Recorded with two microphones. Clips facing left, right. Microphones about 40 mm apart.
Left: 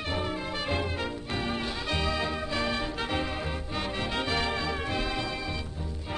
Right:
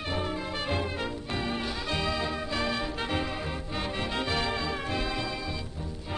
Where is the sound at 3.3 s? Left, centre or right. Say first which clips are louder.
Left 1 dB; centre.